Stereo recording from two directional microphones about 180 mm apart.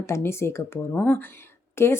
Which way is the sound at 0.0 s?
15° left (ahead or behind).